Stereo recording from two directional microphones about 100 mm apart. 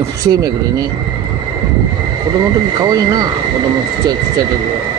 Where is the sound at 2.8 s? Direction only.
40° right (ahead or behind).